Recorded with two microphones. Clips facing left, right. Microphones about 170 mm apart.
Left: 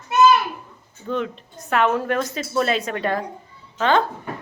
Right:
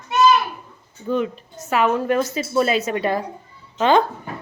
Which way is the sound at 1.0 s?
5° right (ahead or behind).